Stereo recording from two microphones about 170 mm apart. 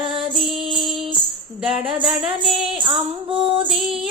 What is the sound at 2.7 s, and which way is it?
Music, 30° right (ahead or behind).